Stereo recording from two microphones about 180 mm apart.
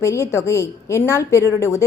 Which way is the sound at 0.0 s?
15° left (ahead or behind).